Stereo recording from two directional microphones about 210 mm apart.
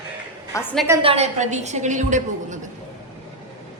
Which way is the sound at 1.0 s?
30° right (ahead or behind).